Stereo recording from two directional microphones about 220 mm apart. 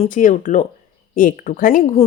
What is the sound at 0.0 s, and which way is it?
Speech, 35° left (ahead or behind).